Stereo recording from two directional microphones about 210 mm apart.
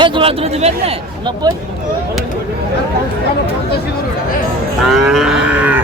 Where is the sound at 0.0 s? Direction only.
25° right (ahead or behind).